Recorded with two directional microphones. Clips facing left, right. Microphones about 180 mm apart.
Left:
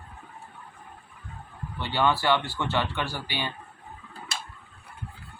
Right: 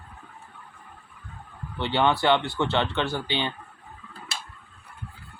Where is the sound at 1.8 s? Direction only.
25° right (ahead or behind).